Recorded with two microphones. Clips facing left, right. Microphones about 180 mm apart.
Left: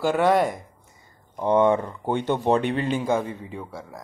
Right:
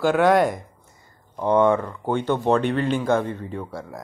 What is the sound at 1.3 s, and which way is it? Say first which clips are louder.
Speech: right 1 dB; 20° left (ahead or behind).